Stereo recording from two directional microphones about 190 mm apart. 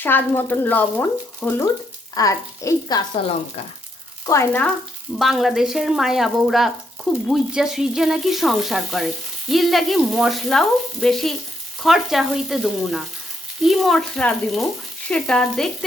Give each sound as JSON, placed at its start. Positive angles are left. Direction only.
{"t": 0.0, "sound": "speech", "side_deg": 10}
{"t": 4.3, "sound": "speech", "side_deg": 10}
{"t": 5.1, "sound": "speech", "side_deg": 0}